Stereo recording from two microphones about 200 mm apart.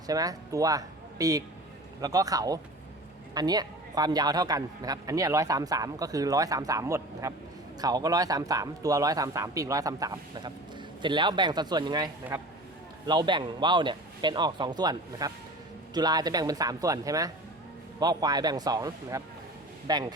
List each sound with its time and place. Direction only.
0.1 s speech: 20° right (ahead or behind)